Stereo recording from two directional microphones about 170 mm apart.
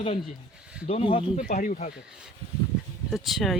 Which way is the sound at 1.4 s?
45° left (ahead or behind).